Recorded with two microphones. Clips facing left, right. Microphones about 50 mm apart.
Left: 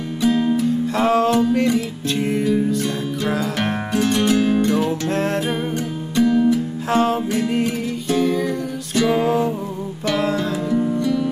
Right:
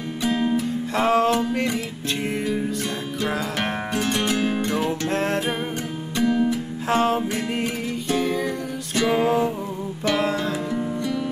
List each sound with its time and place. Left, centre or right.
0.2 s music: right